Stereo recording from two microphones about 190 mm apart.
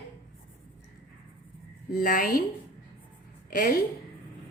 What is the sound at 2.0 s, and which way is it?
Speech, 50° left (ahead or behind).